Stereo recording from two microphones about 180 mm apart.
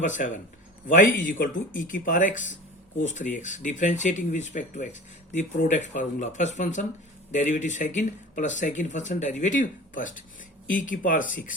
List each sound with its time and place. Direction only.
0.0 s speech: 45° left (ahead or behind)